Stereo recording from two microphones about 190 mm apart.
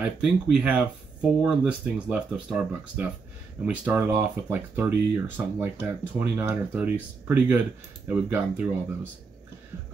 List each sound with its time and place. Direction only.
0.0 s speech: 5° right (ahead or behind)